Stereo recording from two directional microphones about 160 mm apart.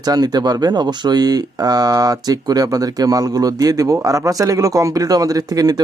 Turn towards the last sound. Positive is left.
turn(degrees=-25)  # may be behind; listen again after turning